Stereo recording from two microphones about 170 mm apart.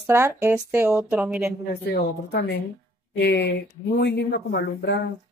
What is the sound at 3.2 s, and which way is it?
Speech, 90° left.